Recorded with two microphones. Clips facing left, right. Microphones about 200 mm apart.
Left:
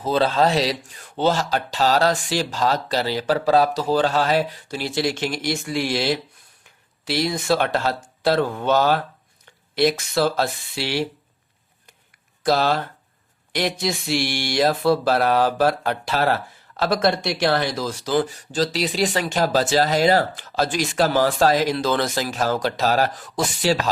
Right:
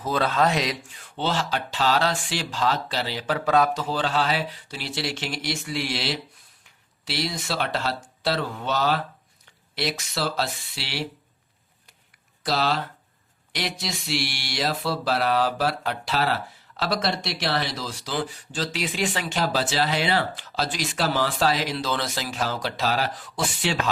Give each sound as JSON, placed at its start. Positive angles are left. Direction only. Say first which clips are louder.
{"t": 0.0, "sound": "speech", "louder": "left 4 dB", "side_deg": 30}
{"t": 1.0, "sound": "speech", "louder": "left 6 dB", "side_deg": 45}
{"t": 12.5, "sound": "speech", "louder": "left 5 dB", "side_deg": 50}